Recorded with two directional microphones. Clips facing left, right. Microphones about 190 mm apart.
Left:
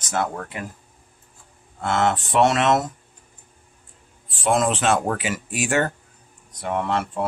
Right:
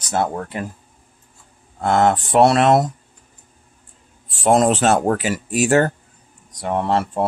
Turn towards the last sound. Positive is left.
turn(degrees=-35)  # may be behind; listen again after turning